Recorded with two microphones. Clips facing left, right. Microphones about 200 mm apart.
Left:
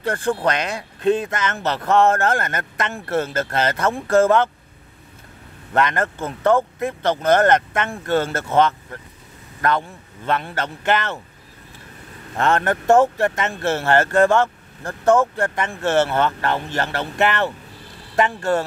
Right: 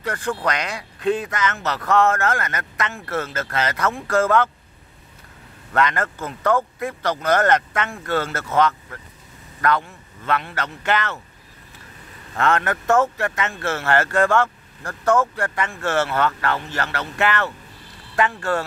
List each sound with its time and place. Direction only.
0.0 s speech: 30° left (ahead or behind)
5.7 s a man's voice: 25° left (ahead or behind)
12.4 s speech: 25° left (ahead or behind)